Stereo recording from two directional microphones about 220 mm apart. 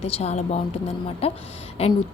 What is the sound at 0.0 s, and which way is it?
A woman's voice, 30° left (ahead or behind).